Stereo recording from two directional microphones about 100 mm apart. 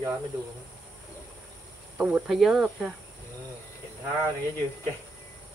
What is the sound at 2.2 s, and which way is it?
Speech, 5° right (ahead or behind).